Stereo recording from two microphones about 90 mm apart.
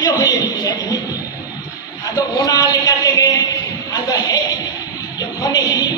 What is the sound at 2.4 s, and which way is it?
Speech, 40° left (ahead or behind).